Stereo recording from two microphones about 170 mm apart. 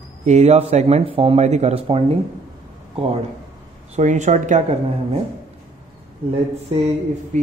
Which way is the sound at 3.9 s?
45° right (ahead or behind).